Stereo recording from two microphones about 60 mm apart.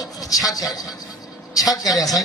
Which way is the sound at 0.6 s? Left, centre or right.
Left.